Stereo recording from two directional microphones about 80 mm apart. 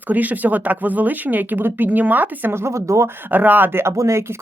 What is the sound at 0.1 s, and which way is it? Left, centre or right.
Speech, right.